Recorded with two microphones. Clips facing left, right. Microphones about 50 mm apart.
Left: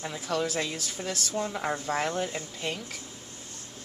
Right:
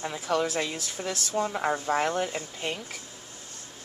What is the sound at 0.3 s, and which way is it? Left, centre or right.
Speech, centre.